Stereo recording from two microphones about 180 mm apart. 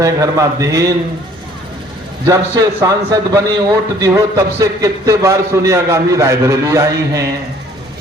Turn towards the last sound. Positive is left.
turn(degrees=-15)  # may be behind; listen again after turning